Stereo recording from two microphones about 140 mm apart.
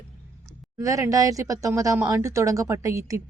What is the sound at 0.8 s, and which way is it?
A woman's voice, 25° right (ahead or behind).